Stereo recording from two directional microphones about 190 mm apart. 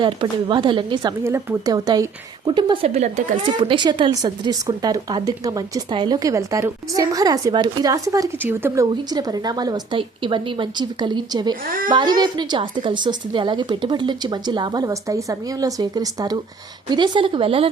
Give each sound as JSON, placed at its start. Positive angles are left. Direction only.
{"t": 0.0, "sound": "speech", "side_deg": -25}
{"t": 1.2, "sound": "speech", "side_deg": -15}
{"t": 2.9, "sound": "a woman's voice", "side_deg": -40}
{"t": 3.6, "sound": "speech", "side_deg": -25}